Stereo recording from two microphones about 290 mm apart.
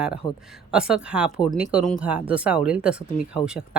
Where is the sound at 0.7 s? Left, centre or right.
Centre.